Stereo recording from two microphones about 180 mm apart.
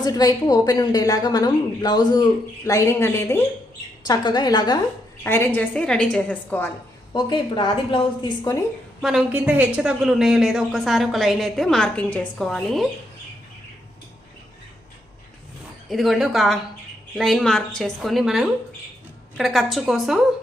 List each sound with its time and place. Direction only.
0.0 s a woman's voice: 20° left (ahead or behind)
5.2 s a woman's voice: 10° left (ahead or behind)
7.1 s a woman's voice: 25° left (ahead or behind)
9.0 s speech: centre (ahead or behind)
15.9 s speech: centre (ahead or behind)